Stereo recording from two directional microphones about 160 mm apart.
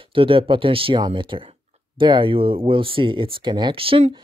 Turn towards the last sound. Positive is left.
turn(degrees=-35)  # may be behind; listen again after turning